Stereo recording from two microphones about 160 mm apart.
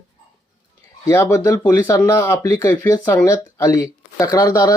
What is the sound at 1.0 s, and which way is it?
Speech, 15° left (ahead or behind).